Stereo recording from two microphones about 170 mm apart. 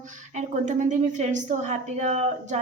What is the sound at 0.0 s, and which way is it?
A woman's voice, 45° right (ahead or behind).